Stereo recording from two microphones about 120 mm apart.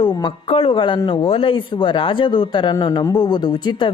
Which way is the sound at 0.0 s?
40° left (ahead or behind).